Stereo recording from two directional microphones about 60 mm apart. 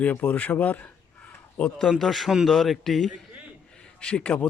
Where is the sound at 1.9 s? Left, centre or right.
Centre.